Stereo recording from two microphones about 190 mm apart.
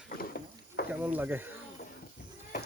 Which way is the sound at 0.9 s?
10° right (ahead or behind).